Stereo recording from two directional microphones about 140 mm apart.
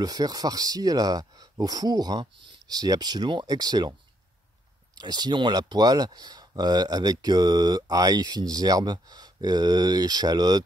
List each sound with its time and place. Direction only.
0.0 s speech: 30° right (ahead or behind)
4.9 s speech: 30° right (ahead or behind)